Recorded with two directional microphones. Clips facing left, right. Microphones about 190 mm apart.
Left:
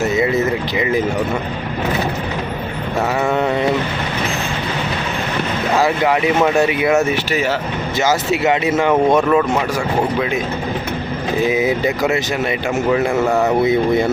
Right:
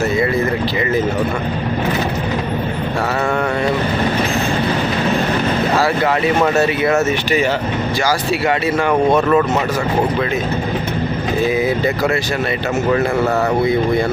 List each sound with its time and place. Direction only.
0.0 s a sound: 20° left (ahead or behind)
5.7 s speech: 15° left (ahead or behind)
11.4 s speech: 20° left (ahead or behind)